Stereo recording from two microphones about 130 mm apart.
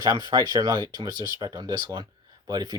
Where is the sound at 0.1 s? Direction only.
30° right (ahead or behind).